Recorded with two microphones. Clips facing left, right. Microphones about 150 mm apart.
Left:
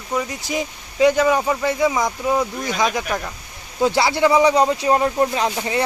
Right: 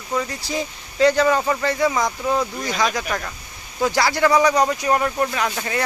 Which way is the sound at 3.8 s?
20° left (ahead or behind).